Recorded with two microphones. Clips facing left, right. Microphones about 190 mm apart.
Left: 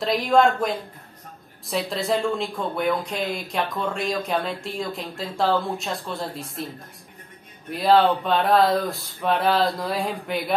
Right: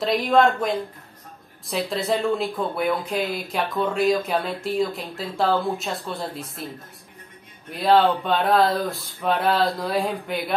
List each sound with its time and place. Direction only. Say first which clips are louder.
0.0 s speech: even; centre (ahead or behind)
1.7 s speech: even; centre (ahead or behind)
7.7 s speech: even; centre (ahead or behind)